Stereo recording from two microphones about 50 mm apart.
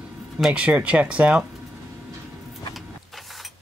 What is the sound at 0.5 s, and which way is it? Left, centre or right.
Speech, right.